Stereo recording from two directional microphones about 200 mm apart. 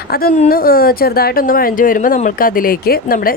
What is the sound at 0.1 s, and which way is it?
A woman's voice, 50° left (ahead or behind).